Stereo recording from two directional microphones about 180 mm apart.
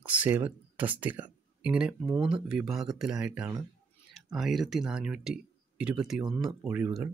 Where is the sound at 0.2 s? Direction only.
10° right (ahead or behind).